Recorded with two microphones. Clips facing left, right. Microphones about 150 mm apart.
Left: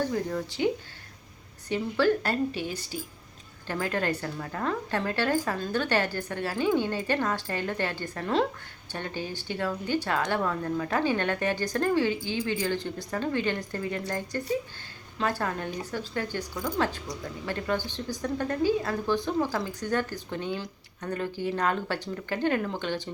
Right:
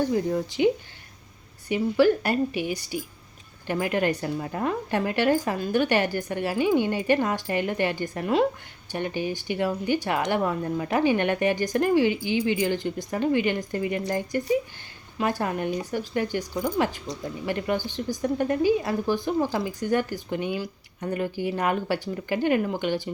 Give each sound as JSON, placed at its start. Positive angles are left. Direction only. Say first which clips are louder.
{"t": 0.0, "sound": "speech", "louder": "right 5 dB", "side_deg": -20}